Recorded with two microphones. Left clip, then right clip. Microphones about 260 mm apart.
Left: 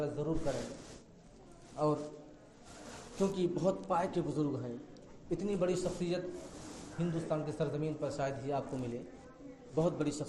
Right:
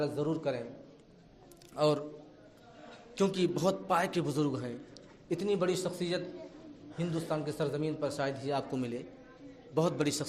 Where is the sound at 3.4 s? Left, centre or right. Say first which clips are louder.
Right 3 dB; right.